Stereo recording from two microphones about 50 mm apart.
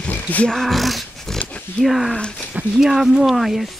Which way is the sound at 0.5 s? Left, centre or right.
Centre.